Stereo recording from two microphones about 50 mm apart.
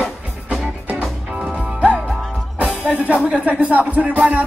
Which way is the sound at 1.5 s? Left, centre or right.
Centre.